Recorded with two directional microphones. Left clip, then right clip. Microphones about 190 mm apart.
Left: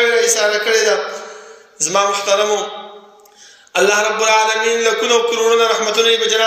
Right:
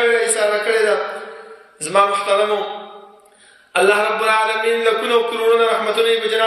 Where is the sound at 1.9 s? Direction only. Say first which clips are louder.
Even; 35° left (ahead or behind).